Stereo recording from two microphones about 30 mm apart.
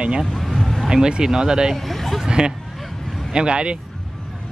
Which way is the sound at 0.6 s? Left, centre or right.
Centre.